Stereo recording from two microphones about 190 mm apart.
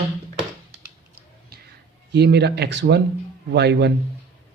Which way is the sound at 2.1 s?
60° right (ahead or behind).